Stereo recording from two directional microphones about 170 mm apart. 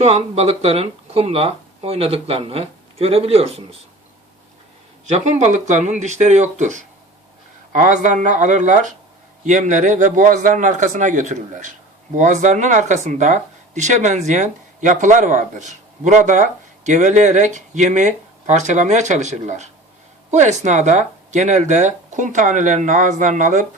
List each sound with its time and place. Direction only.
0.0 s speech: 40° right (ahead or behind)
5.0 s speech: 45° right (ahead or behind)